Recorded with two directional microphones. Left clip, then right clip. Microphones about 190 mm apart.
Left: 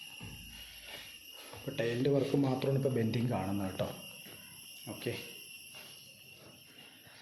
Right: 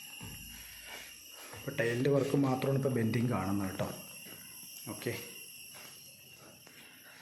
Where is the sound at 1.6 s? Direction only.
5° right (ahead or behind).